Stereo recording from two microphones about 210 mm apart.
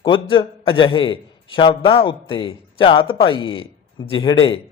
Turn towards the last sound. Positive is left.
turn(degrees=25)  # may be behind; listen again after turning